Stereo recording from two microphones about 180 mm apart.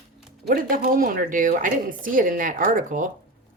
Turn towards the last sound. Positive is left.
turn(degrees=-45)  # may be behind; listen again after turning